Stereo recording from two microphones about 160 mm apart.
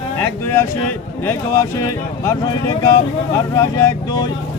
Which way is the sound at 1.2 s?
15° left (ahead or behind).